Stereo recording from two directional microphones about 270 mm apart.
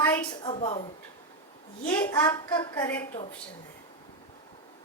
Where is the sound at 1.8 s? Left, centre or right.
Centre.